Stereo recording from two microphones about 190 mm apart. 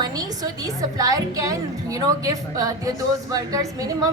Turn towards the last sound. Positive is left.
turn(degrees=-20)  # may be behind; listen again after turning